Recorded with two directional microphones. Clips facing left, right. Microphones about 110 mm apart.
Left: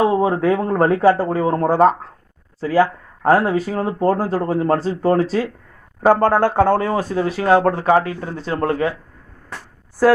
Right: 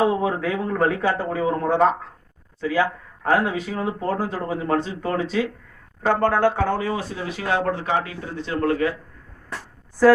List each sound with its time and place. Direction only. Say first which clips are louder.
0.2 s speech: left 6 dB; 35° left (ahead or behind)